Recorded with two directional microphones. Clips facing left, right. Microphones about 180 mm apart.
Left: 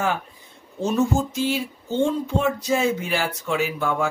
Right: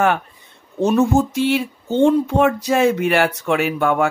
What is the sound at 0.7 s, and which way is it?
Speech, 65° right (ahead or behind).